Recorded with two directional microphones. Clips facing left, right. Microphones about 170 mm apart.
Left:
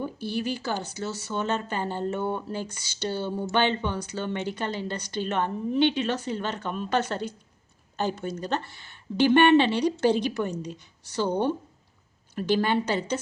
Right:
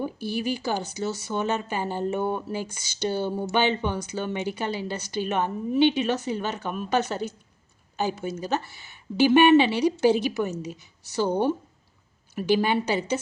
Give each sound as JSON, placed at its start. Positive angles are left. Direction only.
{"t": 0.0, "sound": "speech", "side_deg": -10}